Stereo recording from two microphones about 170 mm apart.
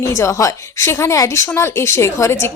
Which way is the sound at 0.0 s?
15° left (ahead or behind).